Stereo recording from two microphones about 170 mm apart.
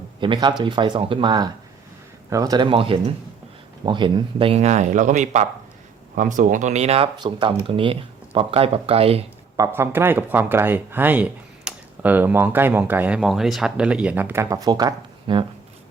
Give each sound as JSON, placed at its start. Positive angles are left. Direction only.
{"t": 0.2, "sound": "speech", "side_deg": -30}
{"t": 9.6, "sound": "speech", "side_deg": -15}